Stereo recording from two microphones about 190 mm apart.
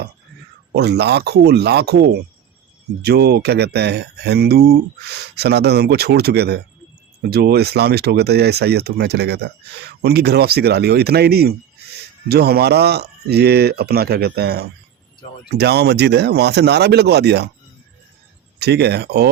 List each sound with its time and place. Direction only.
0.7 s speech: 60° right (ahead or behind)
18.6 s speech: 60° right (ahead or behind)